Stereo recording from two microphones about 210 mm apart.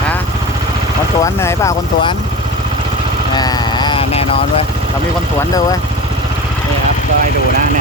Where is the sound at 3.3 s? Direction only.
20° left (ahead or behind).